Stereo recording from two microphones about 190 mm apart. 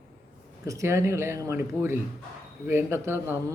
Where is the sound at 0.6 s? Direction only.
15° right (ahead or behind).